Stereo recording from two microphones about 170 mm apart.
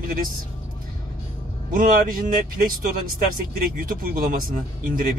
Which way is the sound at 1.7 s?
55° right (ahead or behind).